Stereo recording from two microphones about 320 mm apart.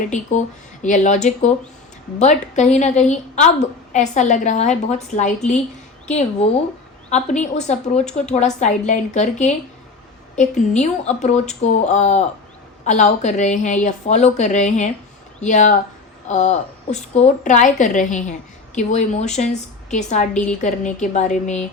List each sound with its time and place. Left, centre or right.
0.1 s a woman's voice: left